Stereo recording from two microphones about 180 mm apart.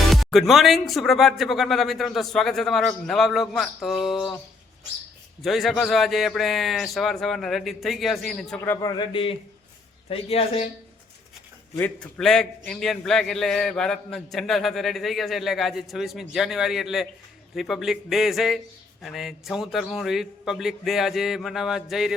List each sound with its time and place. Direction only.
0.1 s a man's voice: centre (ahead or behind)
5.4 s a man's voice: centre (ahead or behind)
9.0 s speech: 30° left (ahead or behind)
11.8 s a man's voice: 5° left (ahead or behind)